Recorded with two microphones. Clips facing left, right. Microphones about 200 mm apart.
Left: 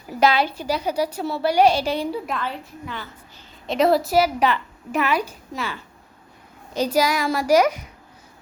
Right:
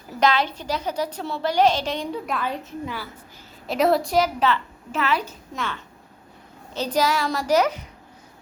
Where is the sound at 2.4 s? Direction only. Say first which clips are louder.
Right 2 dB; 10° right (ahead or behind).